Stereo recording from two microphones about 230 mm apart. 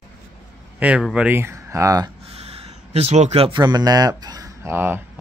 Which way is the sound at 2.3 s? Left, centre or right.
Right.